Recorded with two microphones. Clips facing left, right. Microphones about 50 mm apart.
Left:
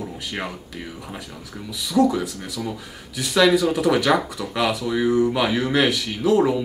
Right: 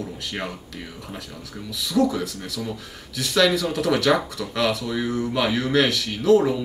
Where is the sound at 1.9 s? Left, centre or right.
Centre.